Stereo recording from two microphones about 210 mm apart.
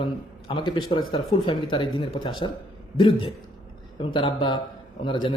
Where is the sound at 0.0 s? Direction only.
25° left (ahead or behind).